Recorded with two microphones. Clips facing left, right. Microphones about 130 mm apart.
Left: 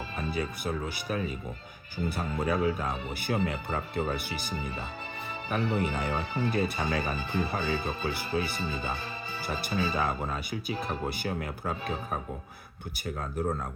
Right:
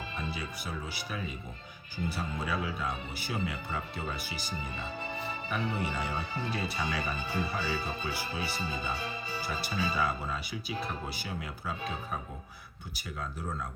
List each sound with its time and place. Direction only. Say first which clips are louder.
0.2 s speech: left 8 dB; 50° left (ahead or behind)